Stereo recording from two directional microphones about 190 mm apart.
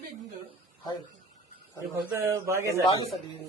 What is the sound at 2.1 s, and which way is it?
Speech, 15° right (ahead or behind).